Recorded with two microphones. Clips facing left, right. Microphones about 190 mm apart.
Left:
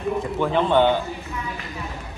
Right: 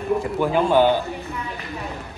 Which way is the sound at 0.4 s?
10° right (ahead or behind).